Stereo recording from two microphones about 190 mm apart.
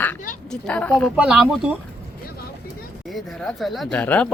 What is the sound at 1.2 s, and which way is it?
Speech, 5° right (ahead or behind).